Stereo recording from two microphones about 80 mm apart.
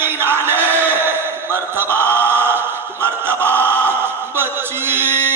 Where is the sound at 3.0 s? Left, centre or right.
Right.